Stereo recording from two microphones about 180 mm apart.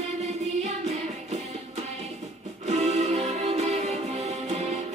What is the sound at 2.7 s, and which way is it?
Music, 35° right (ahead or behind).